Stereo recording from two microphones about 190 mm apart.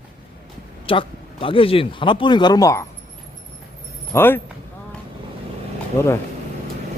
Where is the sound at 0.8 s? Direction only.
30° left (ahead or behind).